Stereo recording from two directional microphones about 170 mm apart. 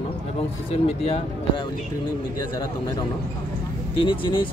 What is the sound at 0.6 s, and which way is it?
Speech, 35° left (ahead or behind).